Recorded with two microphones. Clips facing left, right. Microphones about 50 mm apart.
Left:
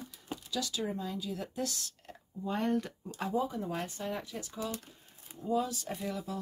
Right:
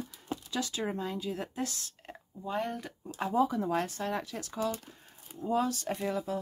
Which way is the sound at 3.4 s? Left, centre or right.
Right.